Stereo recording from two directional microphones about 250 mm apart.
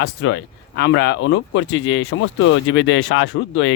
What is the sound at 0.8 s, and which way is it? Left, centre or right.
Speech, left.